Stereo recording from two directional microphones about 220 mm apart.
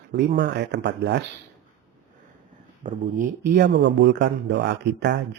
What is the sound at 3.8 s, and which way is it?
Speech, 50° right (ahead or behind).